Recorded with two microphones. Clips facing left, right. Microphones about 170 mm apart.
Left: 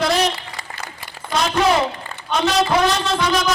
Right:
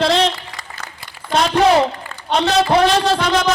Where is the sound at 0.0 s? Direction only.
25° right (ahead or behind).